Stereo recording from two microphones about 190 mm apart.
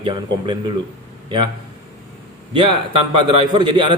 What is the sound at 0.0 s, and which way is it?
Speech, 25° right (ahead or behind).